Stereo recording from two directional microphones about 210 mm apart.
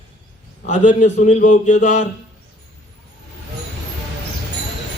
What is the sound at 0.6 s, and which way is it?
Speech, 35° left (ahead or behind).